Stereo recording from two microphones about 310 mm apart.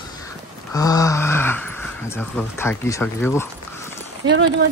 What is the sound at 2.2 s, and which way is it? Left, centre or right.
Speech, centre.